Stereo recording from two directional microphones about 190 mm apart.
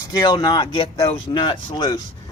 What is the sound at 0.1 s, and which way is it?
Speech, 20° left (ahead or behind).